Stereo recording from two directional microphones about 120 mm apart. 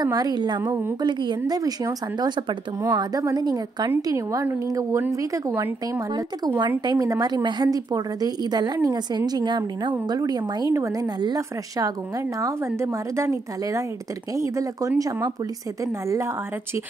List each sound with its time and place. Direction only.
0.0 s a woman's voice: 35° right (ahead or behind)
0.7 s a woman's voice: 15° right (ahead or behind)
1.0 s a woman's voice: 40° right (ahead or behind)